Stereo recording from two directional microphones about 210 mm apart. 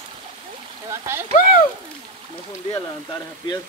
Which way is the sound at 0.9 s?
10° right (ahead or behind).